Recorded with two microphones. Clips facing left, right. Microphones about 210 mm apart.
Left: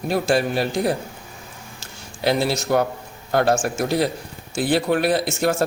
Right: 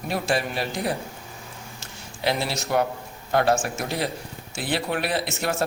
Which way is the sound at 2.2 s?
40° left (ahead or behind).